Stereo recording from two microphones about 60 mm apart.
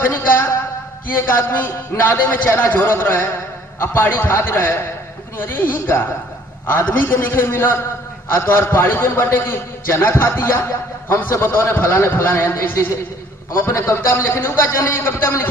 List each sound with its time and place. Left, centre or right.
0.0 s a sound: left
1.1 s a man's voice: left
13.8 s a man's voice: left